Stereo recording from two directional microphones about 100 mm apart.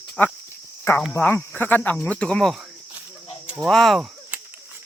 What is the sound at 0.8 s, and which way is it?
Cricket, 20° left (ahead or behind).